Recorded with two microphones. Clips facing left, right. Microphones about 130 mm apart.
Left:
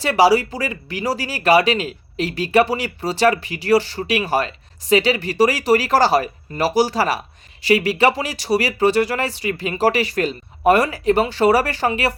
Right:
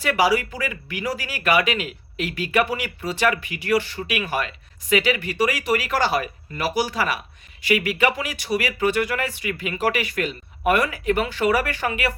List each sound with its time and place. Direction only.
0.0 s speech: 30° left (ahead or behind)